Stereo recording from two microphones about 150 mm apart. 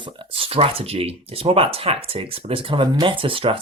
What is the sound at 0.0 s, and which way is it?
Speech, 40° right (ahead or behind).